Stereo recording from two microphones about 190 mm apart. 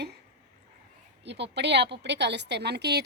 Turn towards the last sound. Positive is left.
turn(degrees=-60)  # may be behind; listen again after turning